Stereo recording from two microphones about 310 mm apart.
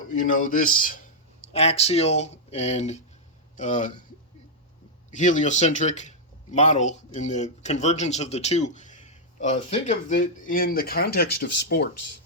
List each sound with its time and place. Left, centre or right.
0.1 s speech: left
5.1 s a man's voice: left